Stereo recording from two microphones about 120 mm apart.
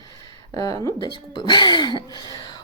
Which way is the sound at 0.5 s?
30° left (ahead or behind).